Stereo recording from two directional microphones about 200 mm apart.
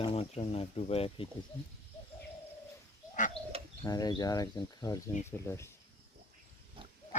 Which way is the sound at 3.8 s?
20° left (ahead or behind).